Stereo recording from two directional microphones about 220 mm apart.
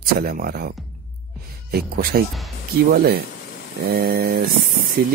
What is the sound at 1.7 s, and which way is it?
Speech, 45° right (ahead or behind).